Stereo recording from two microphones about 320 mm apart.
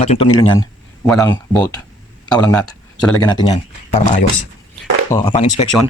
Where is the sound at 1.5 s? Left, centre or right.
Centre.